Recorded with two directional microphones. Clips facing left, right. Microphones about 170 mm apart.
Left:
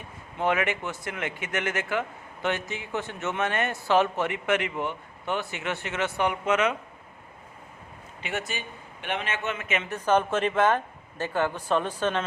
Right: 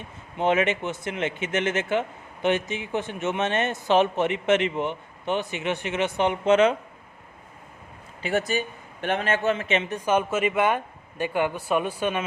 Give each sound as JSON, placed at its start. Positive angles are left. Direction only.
{"t": 0.3, "sound": "speech", "side_deg": -20}
{"t": 8.2, "sound": "a man's voice", "side_deg": -35}
{"t": 9.8, "sound": "speech", "side_deg": -15}